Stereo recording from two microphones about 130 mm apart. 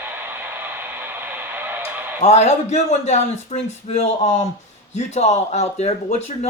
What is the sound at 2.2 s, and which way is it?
Speech, 60° left (ahead or behind).